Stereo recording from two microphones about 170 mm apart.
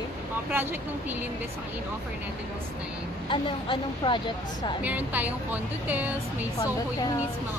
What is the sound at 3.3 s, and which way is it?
Speech, 30° left (ahead or behind).